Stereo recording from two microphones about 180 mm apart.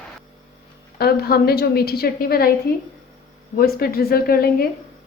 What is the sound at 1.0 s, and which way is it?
A woman's voice, 60° left (ahead or behind).